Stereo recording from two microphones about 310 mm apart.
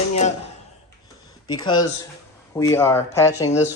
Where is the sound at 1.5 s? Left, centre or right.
Centre.